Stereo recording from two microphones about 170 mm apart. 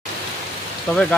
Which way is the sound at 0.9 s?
10° left (ahead or behind).